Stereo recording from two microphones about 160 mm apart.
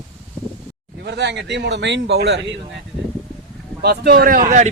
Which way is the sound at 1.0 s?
90° right.